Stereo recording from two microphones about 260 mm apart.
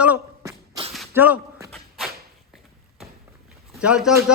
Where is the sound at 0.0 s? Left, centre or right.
Centre.